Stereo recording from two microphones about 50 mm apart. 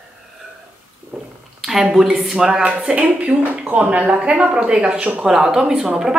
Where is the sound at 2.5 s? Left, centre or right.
Right.